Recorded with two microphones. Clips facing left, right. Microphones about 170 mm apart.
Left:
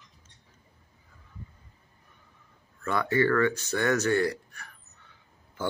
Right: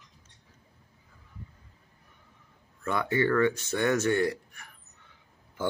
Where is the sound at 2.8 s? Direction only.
20° right (ahead or behind).